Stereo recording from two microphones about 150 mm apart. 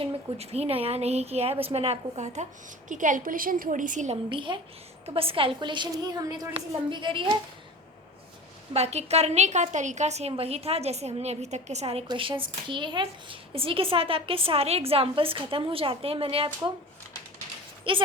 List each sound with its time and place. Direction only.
0.0 s a woman's voice: 45° right (ahead or behind)
2.9 s a woman's voice: 60° right (ahead or behind)
4.3 s a woman's voice: 35° right (ahead or behind)
8.7 s a woman's voice: 45° right (ahead or behind)
12.0 s a woman's voice: 30° right (ahead or behind)
17.9 s a woman's voice: 35° right (ahead or behind)